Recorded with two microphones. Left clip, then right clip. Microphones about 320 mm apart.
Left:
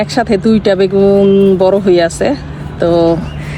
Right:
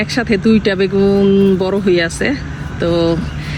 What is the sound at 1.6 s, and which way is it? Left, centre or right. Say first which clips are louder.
Speech: left 7 dB; left.